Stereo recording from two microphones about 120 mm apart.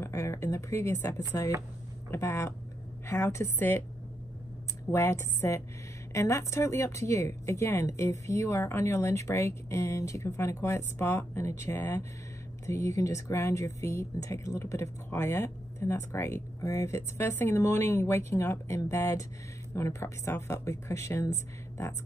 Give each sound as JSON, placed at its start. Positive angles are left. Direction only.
{"t": 0.0, "sound": "a woman's voice", "side_deg": 25}
{"t": 4.9, "sound": "speech", "side_deg": 20}